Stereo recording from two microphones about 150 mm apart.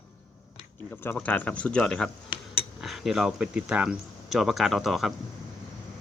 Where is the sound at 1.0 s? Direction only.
10° left (ahead or behind).